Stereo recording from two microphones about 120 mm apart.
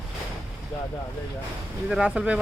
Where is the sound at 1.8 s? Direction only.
5° right (ahead or behind).